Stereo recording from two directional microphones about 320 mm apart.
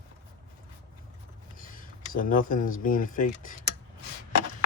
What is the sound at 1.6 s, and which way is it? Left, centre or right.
Speech, left.